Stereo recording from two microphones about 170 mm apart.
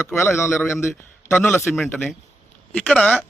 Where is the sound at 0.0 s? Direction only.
15° left (ahead or behind).